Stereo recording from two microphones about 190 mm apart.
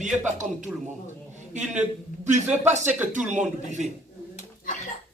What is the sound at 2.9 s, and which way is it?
Speech, 10° right (ahead or behind).